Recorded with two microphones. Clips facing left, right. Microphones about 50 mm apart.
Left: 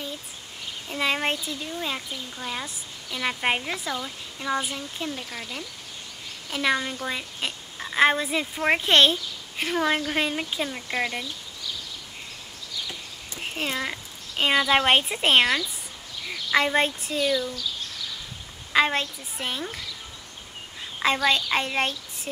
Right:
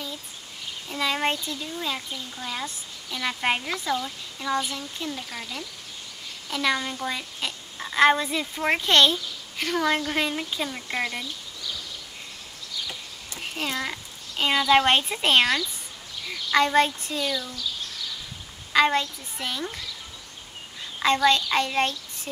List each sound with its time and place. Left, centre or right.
0.8 s speech: centre
5.1 s a woman's voice: centre
13.3 s a sound: centre
14.4 s speech: centre
18.9 s speech: centre
21.0 s speech: centre